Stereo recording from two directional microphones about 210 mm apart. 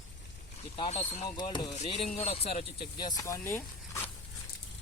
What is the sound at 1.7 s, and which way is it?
Speech, 30° left (ahead or behind).